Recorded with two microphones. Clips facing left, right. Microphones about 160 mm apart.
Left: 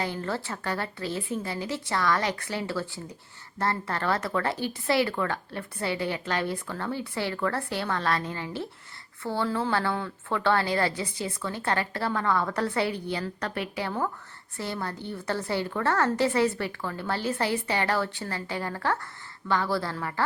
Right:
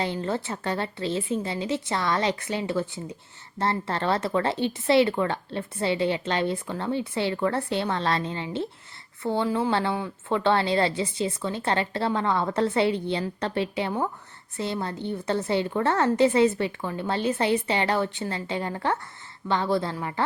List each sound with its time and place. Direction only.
0.0 s speech: 20° right (ahead or behind)